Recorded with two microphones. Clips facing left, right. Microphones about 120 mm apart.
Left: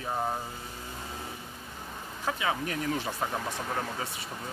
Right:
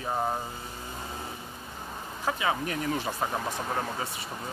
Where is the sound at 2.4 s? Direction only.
15° right (ahead or behind).